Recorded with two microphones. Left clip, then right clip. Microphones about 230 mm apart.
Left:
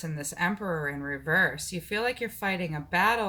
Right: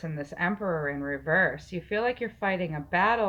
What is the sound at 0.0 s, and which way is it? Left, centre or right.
Speech, left.